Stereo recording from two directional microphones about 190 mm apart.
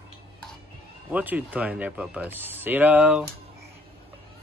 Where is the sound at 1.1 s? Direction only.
10° right (ahead or behind).